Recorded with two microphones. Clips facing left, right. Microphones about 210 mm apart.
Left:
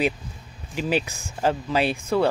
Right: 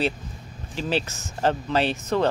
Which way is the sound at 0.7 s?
10° left (ahead or behind).